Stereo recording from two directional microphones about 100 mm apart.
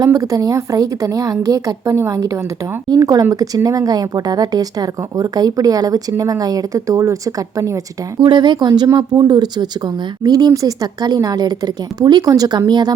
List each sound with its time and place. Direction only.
0.0 s speech: 35° right (ahead or behind)
8.2 s speech: 50° right (ahead or behind)